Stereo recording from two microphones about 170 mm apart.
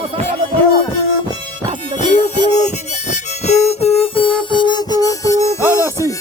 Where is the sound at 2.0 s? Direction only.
45° left (ahead or behind); by 5.6 s 20° left (ahead or behind).